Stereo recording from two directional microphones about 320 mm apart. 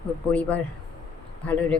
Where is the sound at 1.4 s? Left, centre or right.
Centre.